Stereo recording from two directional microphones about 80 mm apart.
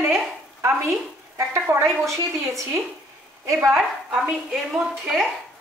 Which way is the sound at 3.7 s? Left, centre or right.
Centre.